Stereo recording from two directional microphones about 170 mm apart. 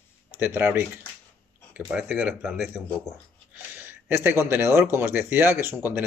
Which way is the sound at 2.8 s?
10° left (ahead or behind).